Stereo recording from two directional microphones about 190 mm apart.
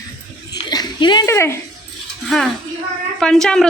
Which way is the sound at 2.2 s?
Centre (ahead or behind).